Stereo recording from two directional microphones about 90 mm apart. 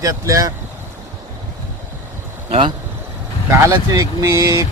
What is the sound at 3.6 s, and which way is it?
Speech, 40° right (ahead or behind).